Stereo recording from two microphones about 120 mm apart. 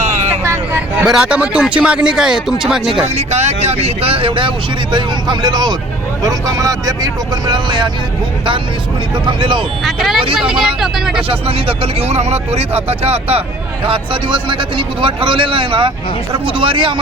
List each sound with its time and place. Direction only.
0.4 s vehicle: 20° right (ahead or behind)
1.0 s speech: 5° right (ahead or behind)
3.2 s speech: 65° right (ahead or behind); by 7.9 s 40° right (ahead or behind)
9.1 s speech: 40° right (ahead or behind)
9.8 s speech: 5° right (ahead or behind)
11.2 s speech: 50° right (ahead or behind)